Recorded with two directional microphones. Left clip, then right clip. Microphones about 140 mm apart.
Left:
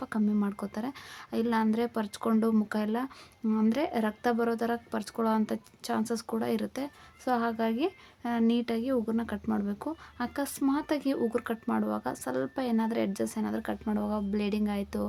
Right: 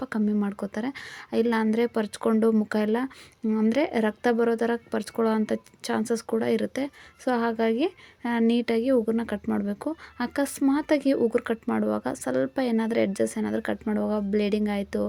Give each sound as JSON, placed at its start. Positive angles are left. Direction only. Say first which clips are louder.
{"t": 0.0, "sound": "a woman's voice", "louder": "right 3 dB", "side_deg": -20}
{"t": 3.4, "sound": "speech", "louder": "right 4 dB", "side_deg": -15}
{"t": 3.7, "sound": "a woman's voice", "louder": "right 7 dB", "side_deg": -25}